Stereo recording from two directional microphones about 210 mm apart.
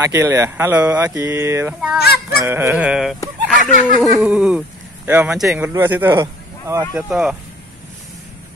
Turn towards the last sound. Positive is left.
turn(degrees=-5)  # may be behind; listen again after turning